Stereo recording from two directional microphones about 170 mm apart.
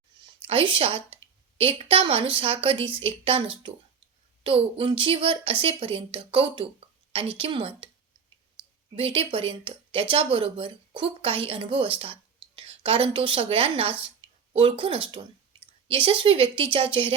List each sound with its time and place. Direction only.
0.4 s a woman's voice: 30° right (ahead or behind)
9.0 s speech: 35° right (ahead or behind)
15.5 s a sound: 30° right (ahead or behind)
15.9 s speech: 30° right (ahead or behind)